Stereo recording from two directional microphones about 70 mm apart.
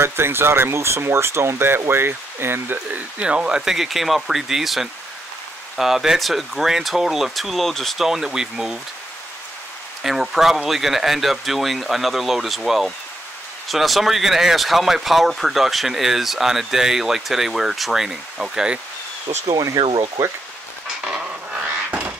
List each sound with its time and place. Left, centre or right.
0.0 s speech: right
3.2 s speech: centre
10.0 s speech: centre
19.4 s speech: right
21.0 s a sound: centre